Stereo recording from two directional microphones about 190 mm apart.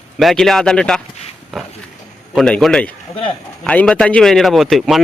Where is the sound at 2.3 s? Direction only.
Centre (ahead or behind).